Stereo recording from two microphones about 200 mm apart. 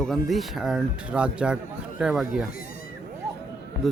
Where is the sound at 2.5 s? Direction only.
45° left (ahead or behind).